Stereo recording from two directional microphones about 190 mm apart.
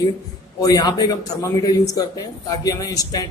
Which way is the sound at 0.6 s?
20° left (ahead or behind).